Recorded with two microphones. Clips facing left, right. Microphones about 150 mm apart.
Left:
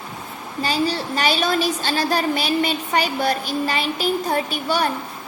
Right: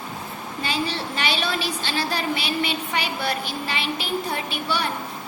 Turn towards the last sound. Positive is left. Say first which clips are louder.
# left 4 dB
turn(degrees=45)  # may be behind; listen again after turning